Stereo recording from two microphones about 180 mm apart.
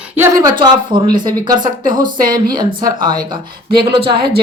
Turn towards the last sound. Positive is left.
turn(degrees=-25)  # may be behind; listen again after turning